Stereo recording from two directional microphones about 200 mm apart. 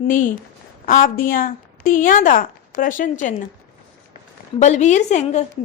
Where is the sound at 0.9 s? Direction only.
45° left (ahead or behind).